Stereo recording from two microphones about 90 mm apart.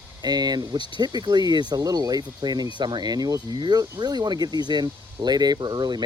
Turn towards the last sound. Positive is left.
turn(degrees=-55)  # may be behind; listen again after turning